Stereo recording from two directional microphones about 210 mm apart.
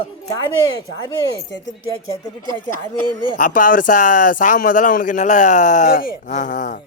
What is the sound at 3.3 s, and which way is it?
A man's voice, 40° left (ahead or behind).